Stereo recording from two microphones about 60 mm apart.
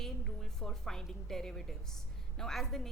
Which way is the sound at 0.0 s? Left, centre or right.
Centre.